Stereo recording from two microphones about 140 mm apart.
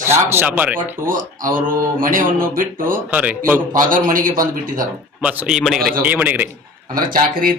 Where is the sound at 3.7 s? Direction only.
75° right (ahead or behind).